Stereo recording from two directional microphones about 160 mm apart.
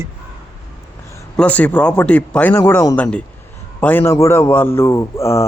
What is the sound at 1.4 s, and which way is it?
A man's voice, 10° left (ahead or behind).